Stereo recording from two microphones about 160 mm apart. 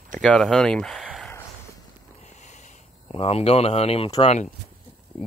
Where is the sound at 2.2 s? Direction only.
45° left (ahead or behind).